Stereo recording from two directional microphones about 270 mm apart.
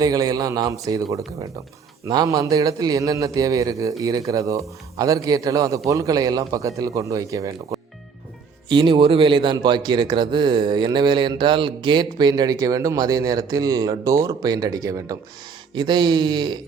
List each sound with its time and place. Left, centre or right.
0.0 s a man's voice: centre